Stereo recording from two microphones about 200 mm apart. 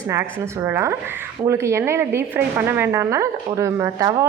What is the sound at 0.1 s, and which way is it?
A woman's voice, 10° right (ahead or behind).